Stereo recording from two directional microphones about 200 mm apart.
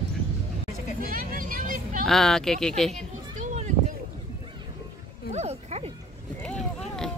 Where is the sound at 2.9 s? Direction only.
35° right (ahead or behind).